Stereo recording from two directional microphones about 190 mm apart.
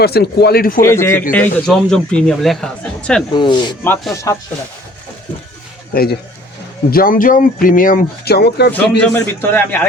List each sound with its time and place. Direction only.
0.0 s speech: 55° left (ahead or behind)
0.8 s a man's voice: 15° left (ahead or behind)
3.3 s speech: 25° left (ahead or behind)
3.8 s a man's voice: 10° left (ahead or behind)
5.9 s speech: 55° left (ahead or behind)
9.0 s a man's voice: 10° left (ahead or behind)